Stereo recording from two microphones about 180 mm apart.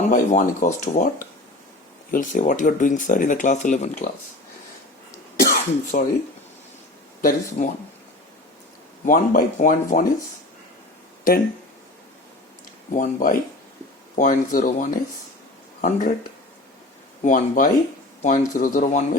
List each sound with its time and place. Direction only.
0.1 s speech: 45° left (ahead or behind)
5.4 s cough: 55° left (ahead or behind)
7.2 s speech: 50° left (ahead or behind)
9.0 s speech: 45° left (ahead or behind)
12.9 s speech: 45° left (ahead or behind)
17.2 s speech: 45° left (ahead or behind)